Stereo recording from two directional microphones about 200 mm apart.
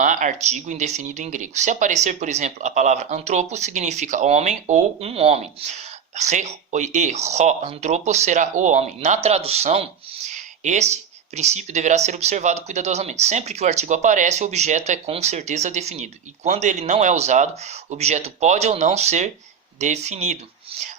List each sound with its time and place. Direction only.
0.0 s speech: 40° right (ahead or behind)
10.2 s a sound: 35° right (ahead or behind)
11.3 s speech: 35° right (ahead or behind)